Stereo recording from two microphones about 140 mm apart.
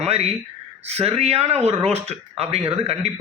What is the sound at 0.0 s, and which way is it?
Gasp, 45° right (ahead or behind).